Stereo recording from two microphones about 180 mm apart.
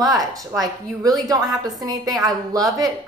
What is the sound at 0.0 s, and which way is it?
A woman's voice, 20° right (ahead or behind).